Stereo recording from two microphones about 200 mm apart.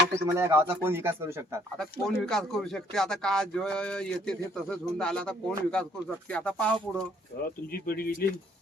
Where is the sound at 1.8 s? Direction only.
5° left (ahead or behind).